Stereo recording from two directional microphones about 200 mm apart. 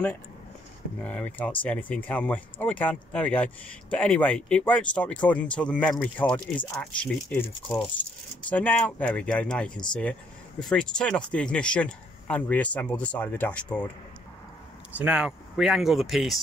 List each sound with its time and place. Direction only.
1.0 s speech: 5° left (ahead or behind)
8.5 s speech: 5° left (ahead or behind)
14.9 s speech: 5° right (ahead or behind)